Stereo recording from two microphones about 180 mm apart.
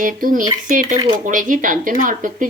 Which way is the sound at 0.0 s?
50° right (ahead or behind).